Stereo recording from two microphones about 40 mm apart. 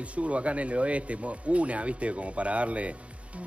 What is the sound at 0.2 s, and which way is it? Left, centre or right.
A man's voice, right.